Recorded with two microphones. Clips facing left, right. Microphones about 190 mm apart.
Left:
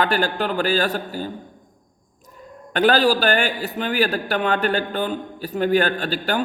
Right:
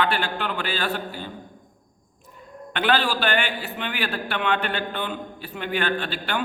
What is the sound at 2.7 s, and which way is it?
A man's voice, 40° left (ahead or behind).